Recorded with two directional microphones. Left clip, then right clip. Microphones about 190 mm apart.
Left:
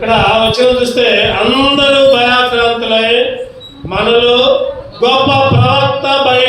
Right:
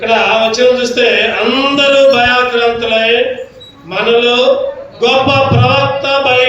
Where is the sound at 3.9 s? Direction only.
35° right (ahead or behind).